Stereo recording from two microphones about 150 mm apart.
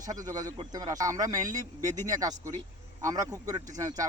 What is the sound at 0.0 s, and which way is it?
Speech, 25° right (ahead or behind).